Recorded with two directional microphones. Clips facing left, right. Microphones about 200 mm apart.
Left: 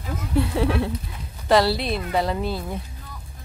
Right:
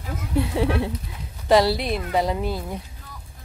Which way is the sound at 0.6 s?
15° right (ahead or behind).